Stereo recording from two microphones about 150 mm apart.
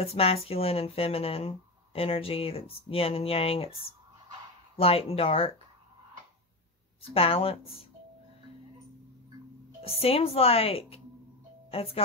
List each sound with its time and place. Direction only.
0.0 s speech: 40° left (ahead or behind)
7.0 s speech: 40° left (ahead or behind)
9.8 s speech: 40° left (ahead or behind)